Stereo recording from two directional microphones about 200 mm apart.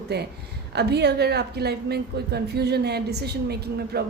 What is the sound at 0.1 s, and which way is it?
A woman's voice, 55° right (ahead or behind).